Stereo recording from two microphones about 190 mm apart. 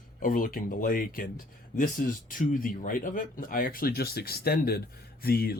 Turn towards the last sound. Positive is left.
turn(degrees=55)  # may be behind; listen again after turning